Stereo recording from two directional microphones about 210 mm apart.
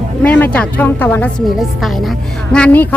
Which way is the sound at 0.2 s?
5° left (ahead or behind).